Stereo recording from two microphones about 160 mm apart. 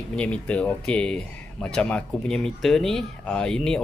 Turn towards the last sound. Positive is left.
turn(degrees=5)  # may be behind; listen again after turning